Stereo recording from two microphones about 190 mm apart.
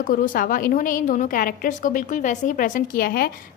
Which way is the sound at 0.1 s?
45° left (ahead or behind).